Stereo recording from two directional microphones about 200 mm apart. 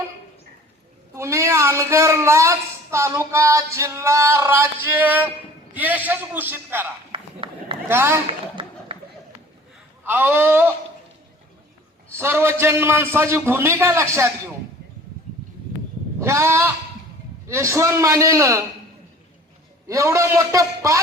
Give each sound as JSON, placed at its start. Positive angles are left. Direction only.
{"t": 1.1, "sound": "a woman's voice", "side_deg": -15}
{"t": 7.1, "sound": "a sound", "side_deg": -25}
{"t": 7.9, "sound": "a woman's voice", "side_deg": -10}
{"t": 8.3, "sound": "a sound", "side_deg": -25}
{"t": 10.0, "sound": "a woman's voice", "side_deg": -10}
{"t": 12.1, "sound": "a woman's voice", "side_deg": -10}
{"t": 16.2, "sound": "a woman's voice", "side_deg": -15}
{"t": 19.9, "sound": "a woman's voice", "side_deg": -15}